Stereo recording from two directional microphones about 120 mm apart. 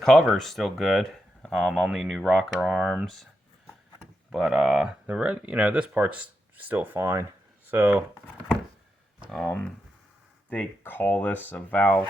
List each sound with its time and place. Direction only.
0.0 s speech: 5° left (ahead or behind)
4.3 s speech: centre (ahead or behind)
9.3 s speech: 5° left (ahead or behind)